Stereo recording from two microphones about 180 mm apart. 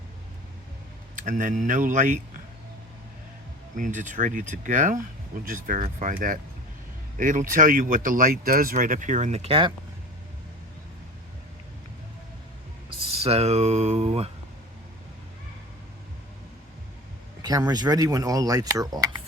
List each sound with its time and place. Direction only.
1.1 s speech: 45° right (ahead or behind)
3.8 s speech: 45° right (ahead or behind)
13.1 s speech: 35° right (ahead or behind)
17.4 s speech: 20° right (ahead or behind)